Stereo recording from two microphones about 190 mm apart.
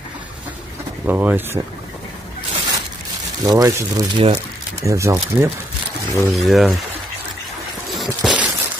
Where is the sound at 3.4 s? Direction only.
20° right (ahead or behind).